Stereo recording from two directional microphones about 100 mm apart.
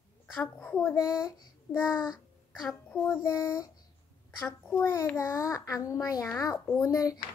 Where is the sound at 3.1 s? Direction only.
30° left (ahead or behind).